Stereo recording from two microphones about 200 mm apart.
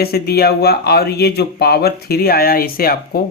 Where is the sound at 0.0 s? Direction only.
50° left (ahead or behind).